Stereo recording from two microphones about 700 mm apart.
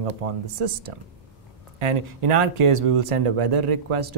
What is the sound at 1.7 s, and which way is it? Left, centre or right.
Speech, right.